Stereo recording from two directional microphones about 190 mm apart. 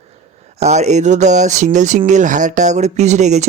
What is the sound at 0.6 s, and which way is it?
Speech, 35° right (ahead or behind).